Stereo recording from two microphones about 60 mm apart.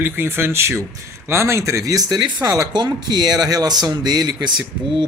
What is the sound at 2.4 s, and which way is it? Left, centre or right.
Speech, right.